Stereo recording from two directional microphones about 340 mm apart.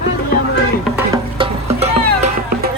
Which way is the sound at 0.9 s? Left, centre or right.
Centre.